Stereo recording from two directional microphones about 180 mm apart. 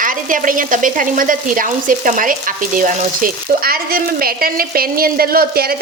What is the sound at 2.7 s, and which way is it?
Speech, 50° right (ahead or behind).